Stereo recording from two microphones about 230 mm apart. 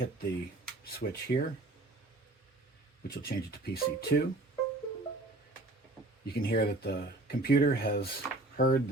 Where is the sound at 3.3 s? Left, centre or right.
Left.